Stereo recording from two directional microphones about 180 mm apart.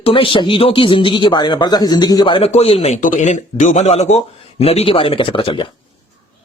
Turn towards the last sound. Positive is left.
turn(degrees=30)  # may be behind; listen again after turning